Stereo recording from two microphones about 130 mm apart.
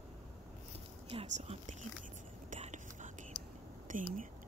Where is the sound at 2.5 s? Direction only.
75° right (ahead or behind).